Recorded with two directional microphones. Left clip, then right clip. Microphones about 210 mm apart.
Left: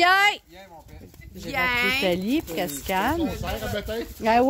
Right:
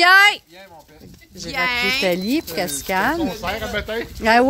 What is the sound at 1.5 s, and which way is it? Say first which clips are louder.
Speech: right 3 dB; 45° left (ahead or behind).